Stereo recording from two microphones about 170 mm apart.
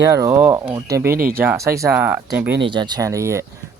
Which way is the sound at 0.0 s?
20° right (ahead or behind).